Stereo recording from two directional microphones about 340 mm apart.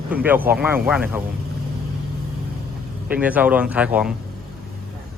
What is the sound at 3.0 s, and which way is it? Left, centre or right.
Speech, centre.